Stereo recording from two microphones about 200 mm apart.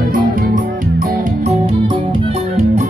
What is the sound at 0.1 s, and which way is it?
Music, 45° right (ahead or behind).